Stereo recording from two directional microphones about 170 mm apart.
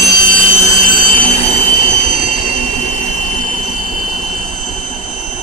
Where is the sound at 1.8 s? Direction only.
50° left (ahead or behind).